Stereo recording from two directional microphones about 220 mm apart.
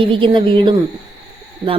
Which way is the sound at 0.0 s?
25° right (ahead or behind).